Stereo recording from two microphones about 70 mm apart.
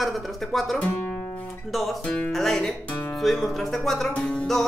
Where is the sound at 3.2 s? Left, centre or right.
Centre.